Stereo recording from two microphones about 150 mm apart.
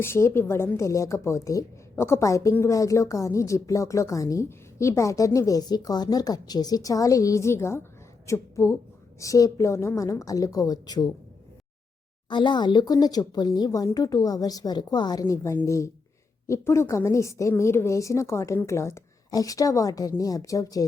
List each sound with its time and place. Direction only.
0.0 s a woman's voice: 15° left (ahead or behind)
12.3 s a woman's voice: 30° left (ahead or behind)